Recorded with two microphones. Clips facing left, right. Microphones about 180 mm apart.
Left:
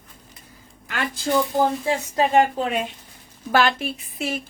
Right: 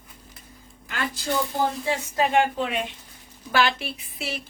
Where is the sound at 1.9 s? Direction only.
40° left (ahead or behind).